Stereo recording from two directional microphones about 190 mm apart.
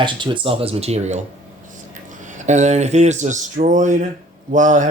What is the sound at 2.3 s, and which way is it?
Speech, 40° right (ahead or behind).